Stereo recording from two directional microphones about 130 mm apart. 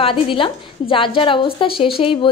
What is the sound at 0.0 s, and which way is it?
A woman's voice, 40° left (ahead or behind).